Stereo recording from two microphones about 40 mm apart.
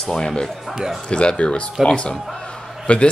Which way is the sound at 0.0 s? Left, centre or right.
Centre.